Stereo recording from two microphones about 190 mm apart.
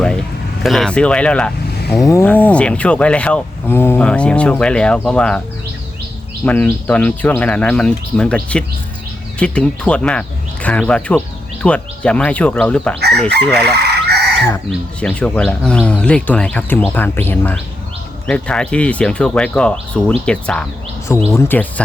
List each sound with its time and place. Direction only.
0.6 s speech: centre (ahead or behind)
6.4 s speech: 10° left (ahead or behind)
13.7 s chicken: 60° right (ahead or behind)
14.7 s speech: 5° left (ahead or behind)